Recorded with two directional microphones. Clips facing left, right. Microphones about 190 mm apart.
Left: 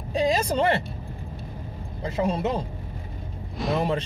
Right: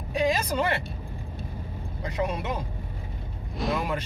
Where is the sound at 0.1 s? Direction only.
30° left (ahead or behind).